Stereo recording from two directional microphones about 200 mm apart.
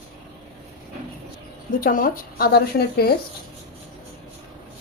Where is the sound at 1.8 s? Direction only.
45° left (ahead or behind).